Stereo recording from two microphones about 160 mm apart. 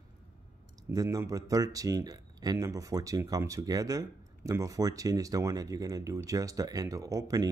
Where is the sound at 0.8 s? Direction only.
20° right (ahead or behind).